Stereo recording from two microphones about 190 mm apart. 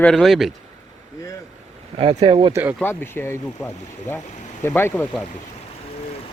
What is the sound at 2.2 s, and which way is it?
Speech, 30° right (ahead or behind).